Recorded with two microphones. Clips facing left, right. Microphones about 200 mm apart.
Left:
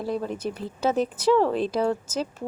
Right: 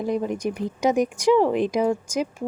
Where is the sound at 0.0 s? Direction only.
15° right (ahead or behind).